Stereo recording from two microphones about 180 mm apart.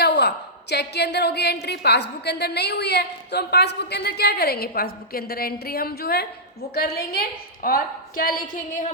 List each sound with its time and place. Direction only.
0.0 s a woman's voice: 65° left (ahead or behind); by 8.9 s 50° left (ahead or behind)